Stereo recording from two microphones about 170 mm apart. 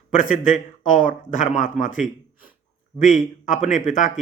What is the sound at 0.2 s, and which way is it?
Speech, 50° left (ahead or behind).